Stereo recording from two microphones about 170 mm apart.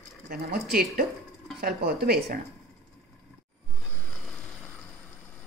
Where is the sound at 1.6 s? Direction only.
65° right (ahead or behind).